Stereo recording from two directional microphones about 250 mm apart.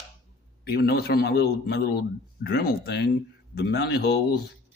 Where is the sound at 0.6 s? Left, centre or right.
Left.